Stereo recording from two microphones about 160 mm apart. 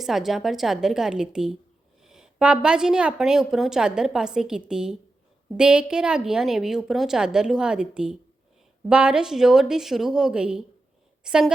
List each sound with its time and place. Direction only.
0.0 s a woman's voice: centre (ahead or behind)